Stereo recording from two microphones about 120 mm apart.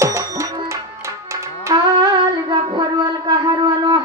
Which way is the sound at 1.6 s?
35° right (ahead or behind).